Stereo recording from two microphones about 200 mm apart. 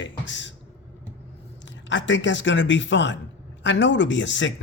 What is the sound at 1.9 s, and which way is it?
Speech, 65° left (ahead or behind).